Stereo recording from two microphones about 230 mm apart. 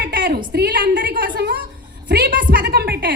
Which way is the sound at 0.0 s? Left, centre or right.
Right.